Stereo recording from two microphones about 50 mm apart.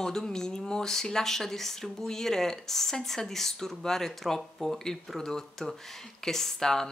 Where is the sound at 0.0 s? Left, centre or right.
Centre.